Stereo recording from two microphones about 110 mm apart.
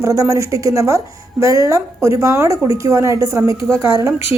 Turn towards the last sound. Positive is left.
turn(degrees=-30)  # may be behind; listen again after turning